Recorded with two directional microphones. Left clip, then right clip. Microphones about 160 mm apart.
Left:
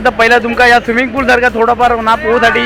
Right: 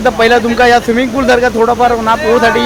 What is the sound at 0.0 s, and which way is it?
Speech, 10° right (ahead or behind).